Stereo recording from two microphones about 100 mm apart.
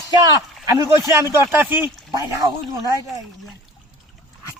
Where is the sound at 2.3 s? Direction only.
35° right (ahead or behind).